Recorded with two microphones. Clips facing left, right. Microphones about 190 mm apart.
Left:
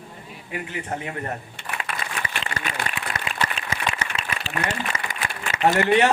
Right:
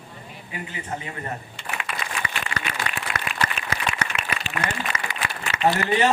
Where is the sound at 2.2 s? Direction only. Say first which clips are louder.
Even; 60° left (ahead or behind).